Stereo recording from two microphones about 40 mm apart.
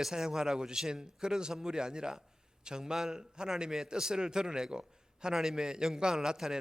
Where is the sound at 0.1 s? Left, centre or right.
Centre.